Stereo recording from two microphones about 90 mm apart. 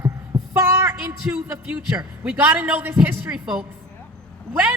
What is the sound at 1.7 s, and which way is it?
A man's voice, 15° right (ahead or behind).